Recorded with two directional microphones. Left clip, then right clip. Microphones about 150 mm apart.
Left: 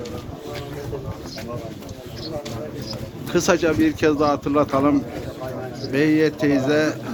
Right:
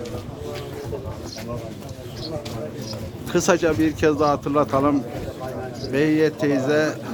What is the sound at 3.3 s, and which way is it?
Speech, 5° right (ahead or behind).